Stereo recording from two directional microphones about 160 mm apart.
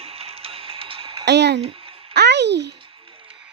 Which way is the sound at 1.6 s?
35° right (ahead or behind).